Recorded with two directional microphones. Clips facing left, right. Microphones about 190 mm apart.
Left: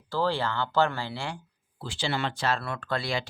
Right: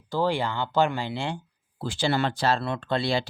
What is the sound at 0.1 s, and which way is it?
Speech, 15° right (ahead or behind).